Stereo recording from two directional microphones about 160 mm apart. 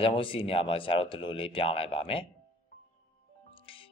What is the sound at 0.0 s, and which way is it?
Speech, 35° left (ahead or behind).